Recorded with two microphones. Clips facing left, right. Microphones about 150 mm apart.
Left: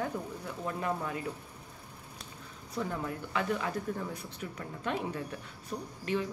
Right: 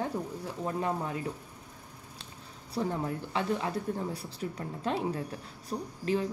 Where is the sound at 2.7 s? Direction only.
30° right (ahead or behind).